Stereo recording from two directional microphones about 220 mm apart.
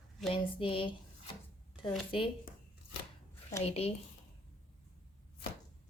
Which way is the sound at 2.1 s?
25° left (ahead or behind).